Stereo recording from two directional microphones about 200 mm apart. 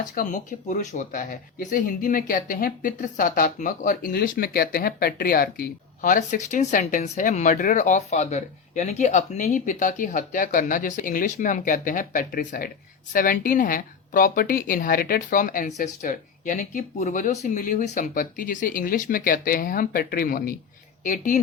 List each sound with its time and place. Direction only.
0.0 s speech: 40° left (ahead or behind)